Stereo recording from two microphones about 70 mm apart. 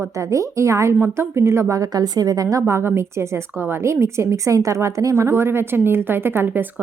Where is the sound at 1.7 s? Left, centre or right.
Right.